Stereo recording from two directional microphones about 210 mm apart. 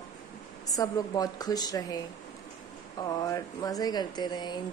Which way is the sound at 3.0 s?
15° left (ahead or behind).